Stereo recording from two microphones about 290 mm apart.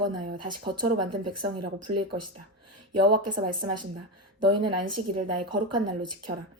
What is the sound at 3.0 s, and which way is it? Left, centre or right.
Speech, centre.